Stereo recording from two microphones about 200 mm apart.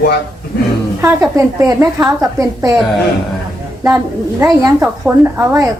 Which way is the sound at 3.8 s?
15° right (ahead or behind).